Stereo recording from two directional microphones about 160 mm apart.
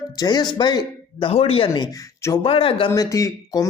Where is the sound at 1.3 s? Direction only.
40° left (ahead or behind).